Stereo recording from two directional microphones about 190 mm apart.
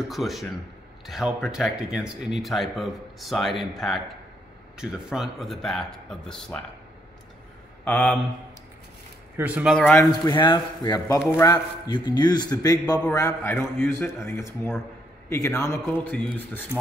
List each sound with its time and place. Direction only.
0.1 s a man's voice: centre (ahead or behind)
7.8 s speech: 5° left (ahead or behind)
9.4 s speech: 5° right (ahead or behind)
9.8 s a man's voice: 10° left (ahead or behind)
10.2 s a man's voice: 25° left (ahead or behind); by 16.6 s 10° left (ahead or behind)